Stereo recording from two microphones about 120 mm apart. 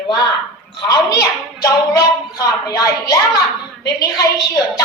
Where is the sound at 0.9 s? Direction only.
30° left (ahead or behind).